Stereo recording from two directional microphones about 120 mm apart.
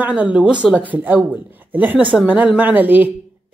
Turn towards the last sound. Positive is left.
turn(degrees=-15)  # may be behind; listen again after turning